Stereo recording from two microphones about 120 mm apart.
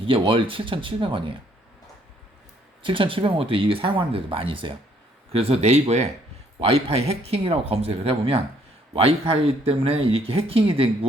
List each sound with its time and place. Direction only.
0.0 s speech: 50° right (ahead or behind)
2.8 s speech: 45° right (ahead or behind)